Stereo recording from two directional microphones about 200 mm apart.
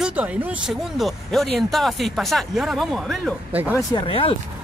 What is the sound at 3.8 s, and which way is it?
Speech, 20° left (ahead or behind).